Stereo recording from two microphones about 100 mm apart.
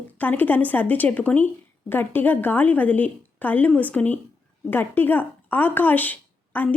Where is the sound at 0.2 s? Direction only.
20° left (ahead or behind).